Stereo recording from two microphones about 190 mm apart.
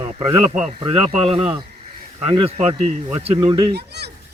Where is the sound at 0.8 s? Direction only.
30° right (ahead or behind).